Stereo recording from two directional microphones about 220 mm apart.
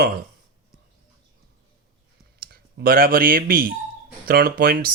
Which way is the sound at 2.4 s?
45° right (ahead or behind).